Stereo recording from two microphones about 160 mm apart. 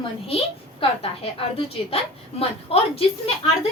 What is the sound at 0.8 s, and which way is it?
A woman's voice, 35° left (ahead or behind).